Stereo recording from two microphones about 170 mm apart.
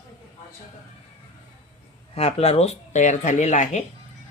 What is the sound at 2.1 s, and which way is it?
Speech, 35° left (ahead or behind).